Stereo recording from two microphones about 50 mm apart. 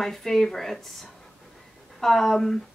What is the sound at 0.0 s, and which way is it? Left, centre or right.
Speech, centre.